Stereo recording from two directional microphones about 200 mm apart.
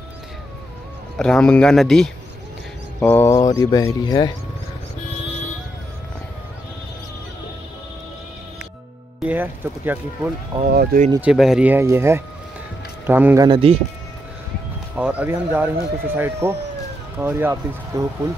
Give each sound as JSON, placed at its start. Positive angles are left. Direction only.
{"t": 1.1, "sound": "speech", "side_deg": 5}
{"t": 3.0, "sound": "speech", "side_deg": 10}
{"t": 9.2, "sound": "speech", "side_deg": -10}
{"t": 10.7, "sound": "speech", "side_deg": -50}
{"t": 11.1, "sound": "speech", "side_deg": -5}
{"t": 13.5, "sound": "speech", "side_deg": -30}
{"t": 15.0, "sound": "speech", "side_deg": -5}